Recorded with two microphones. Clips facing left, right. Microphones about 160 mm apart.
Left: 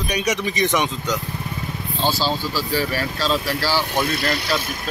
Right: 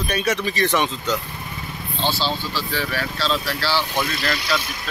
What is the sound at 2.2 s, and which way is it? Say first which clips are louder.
Speech: left 2 dB; 10° left (ahead or behind).